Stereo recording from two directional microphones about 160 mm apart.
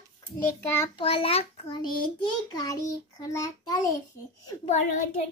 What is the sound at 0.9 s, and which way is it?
Speech, 35° left (ahead or behind).